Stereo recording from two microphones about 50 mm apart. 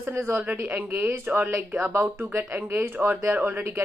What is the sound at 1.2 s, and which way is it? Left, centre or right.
Speech, right.